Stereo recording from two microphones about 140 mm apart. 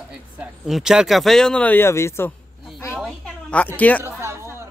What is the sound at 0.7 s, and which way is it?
Speech, 5° right (ahead or behind).